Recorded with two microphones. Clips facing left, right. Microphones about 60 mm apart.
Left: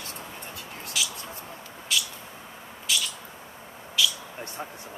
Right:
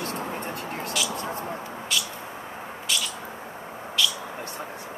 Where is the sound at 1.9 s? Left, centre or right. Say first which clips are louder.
Left 1 dB; centre.